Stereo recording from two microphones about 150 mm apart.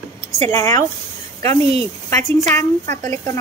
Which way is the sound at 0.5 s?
25° left (ahead or behind).